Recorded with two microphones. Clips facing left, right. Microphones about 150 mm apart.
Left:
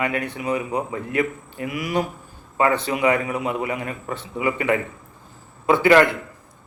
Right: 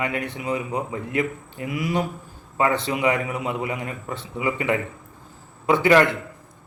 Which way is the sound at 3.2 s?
20° left (ahead or behind).